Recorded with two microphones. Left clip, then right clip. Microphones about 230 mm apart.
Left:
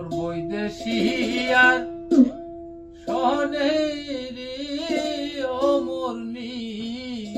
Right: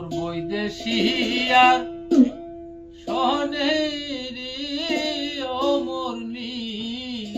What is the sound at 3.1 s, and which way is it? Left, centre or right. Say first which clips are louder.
Music: even; centre.